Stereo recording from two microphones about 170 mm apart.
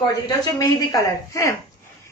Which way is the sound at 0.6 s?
20° left (ahead or behind).